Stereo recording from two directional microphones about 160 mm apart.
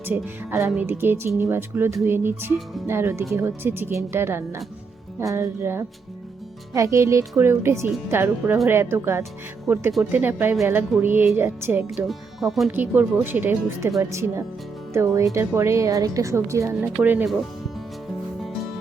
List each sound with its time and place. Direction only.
0.0 s speech: 15° right (ahead or behind)
12.0 s speech: centre (ahead or behind)
12.7 s speech: 10° right (ahead or behind)